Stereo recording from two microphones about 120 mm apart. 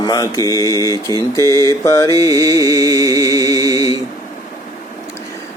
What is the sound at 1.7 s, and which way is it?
Mantra, 25° left (ahead or behind).